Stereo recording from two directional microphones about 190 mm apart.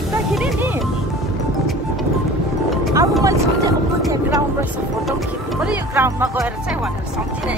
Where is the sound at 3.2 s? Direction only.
20° right (ahead or behind).